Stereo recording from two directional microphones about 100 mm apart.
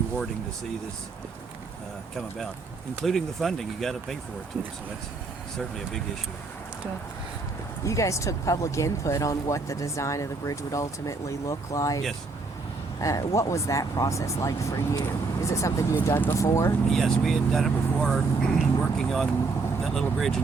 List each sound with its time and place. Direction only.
3.0 s speech: 5° left (ahead or behind)
5.5 s speech: 5° left (ahead or behind)
7.9 s speech: 30° left (ahead or behind)
16.9 s speech: centre (ahead or behind)